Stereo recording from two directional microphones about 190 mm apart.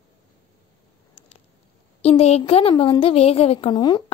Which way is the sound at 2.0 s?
35° left (ahead or behind).